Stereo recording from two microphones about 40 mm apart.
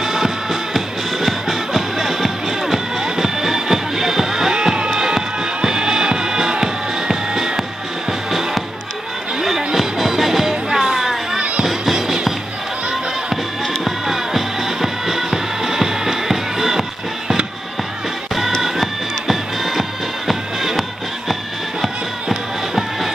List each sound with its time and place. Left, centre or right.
0.0 s music: centre
11.3 s music: right
11.6 s music: centre
13.8 s music: centre
18.6 s music: centre
22.3 s music: centre